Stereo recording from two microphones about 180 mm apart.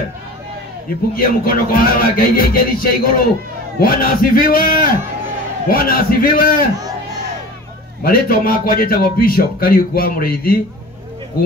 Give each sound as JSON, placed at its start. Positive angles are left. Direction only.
{"t": 1.1, "sound": "speech", "side_deg": 55}
{"t": 8.0, "sound": "a man's voice", "side_deg": 55}